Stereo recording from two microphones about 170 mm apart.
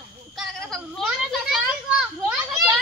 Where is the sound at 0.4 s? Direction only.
Centre (ahead or behind).